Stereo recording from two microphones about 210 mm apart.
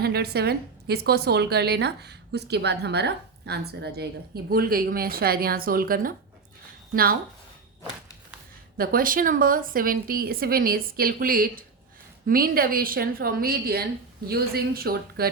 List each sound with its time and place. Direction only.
0.0 s a woman's voice: 50° right (ahead or behind)
8.8 s a woman's voice: 45° right (ahead or behind)